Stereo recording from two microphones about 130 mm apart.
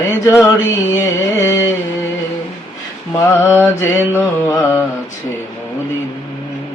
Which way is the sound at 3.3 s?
20° left (ahead or behind).